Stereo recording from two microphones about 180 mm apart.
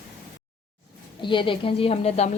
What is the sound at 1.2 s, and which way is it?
A woman's voice, 25° left (ahead or behind).